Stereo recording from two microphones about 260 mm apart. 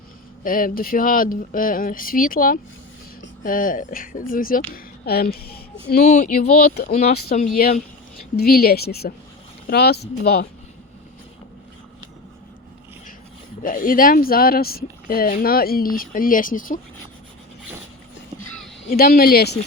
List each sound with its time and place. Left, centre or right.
0.4 s speech: left
13.6 s speech: left
18.9 s speech: left